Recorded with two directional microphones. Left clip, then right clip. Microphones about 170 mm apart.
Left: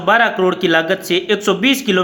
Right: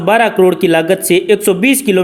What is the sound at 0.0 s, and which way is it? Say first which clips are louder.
A man's voice: right 3 dB; 35° right (ahead or behind).